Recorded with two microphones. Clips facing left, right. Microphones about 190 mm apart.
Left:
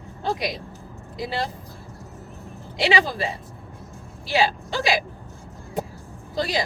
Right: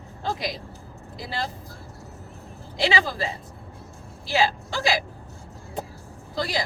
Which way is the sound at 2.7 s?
20° left (ahead or behind).